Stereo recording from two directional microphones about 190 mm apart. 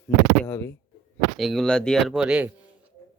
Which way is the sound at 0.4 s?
15° left (ahead or behind).